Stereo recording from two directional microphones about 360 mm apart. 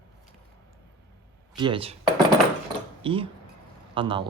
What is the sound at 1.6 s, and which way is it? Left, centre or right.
Speech, centre.